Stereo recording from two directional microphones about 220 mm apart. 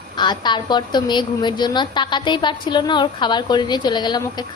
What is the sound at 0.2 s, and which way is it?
A woman's voice, 20° left (ahead or behind).